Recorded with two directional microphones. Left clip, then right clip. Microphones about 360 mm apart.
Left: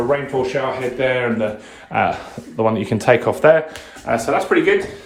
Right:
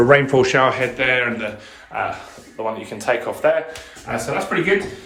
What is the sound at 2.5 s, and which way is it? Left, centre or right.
Speech, left.